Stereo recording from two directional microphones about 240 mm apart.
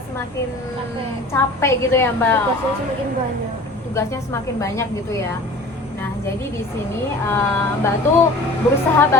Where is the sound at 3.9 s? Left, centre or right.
Centre.